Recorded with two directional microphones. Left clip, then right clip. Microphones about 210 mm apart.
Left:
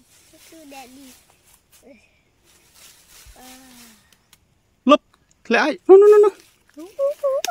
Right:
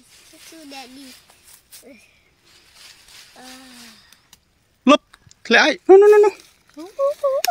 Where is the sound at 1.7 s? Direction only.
35° right (ahead or behind).